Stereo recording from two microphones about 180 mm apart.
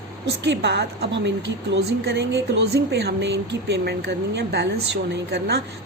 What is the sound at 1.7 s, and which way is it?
Speech, 65° right (ahead or behind).